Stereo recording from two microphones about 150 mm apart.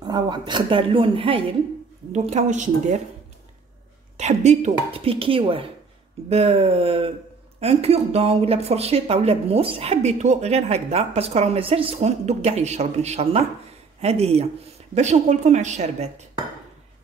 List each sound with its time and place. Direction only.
0.0 s speech: 30° right (ahead or behind)
2.1 s speech: 50° right (ahead or behind)
4.2 s speech: 50° right (ahead or behind)